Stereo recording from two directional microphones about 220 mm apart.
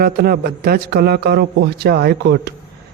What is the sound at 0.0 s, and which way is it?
A man's voice, 45° right (ahead or behind).